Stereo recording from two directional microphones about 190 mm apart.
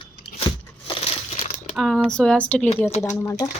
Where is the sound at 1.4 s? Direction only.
35° left (ahead or behind).